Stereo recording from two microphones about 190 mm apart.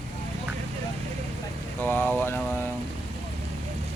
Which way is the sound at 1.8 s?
10° left (ahead or behind).